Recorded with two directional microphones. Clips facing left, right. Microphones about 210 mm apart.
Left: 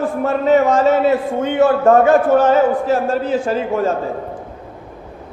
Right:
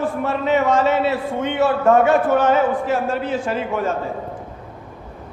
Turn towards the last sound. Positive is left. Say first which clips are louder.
# left 4 dB
turn(degrees=35)  # may be behind; listen again after turning